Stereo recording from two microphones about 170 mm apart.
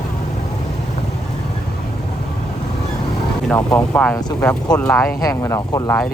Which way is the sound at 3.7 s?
5° left (ahead or behind).